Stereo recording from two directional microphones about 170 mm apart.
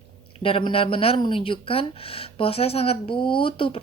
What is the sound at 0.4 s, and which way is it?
A woman's voice, 30° left (ahead or behind).